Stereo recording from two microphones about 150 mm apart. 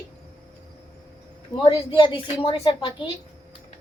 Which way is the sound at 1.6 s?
35° left (ahead or behind).